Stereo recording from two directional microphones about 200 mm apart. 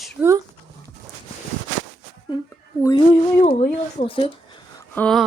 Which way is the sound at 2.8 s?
15° left (ahead or behind).